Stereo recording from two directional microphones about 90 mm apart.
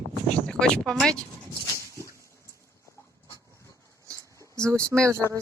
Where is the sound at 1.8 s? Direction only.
35° right (ahead or behind).